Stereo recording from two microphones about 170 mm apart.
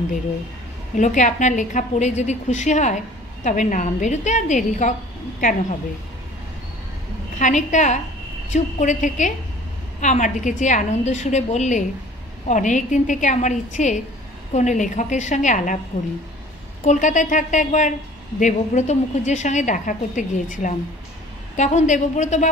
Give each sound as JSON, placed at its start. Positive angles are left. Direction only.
{"t": 0.9, "sound": "a woman's voice", "side_deg": 45}
{"t": 7.3, "sound": "a woman's voice", "side_deg": 45}
{"t": 16.8, "sound": "a woman's voice", "side_deg": 45}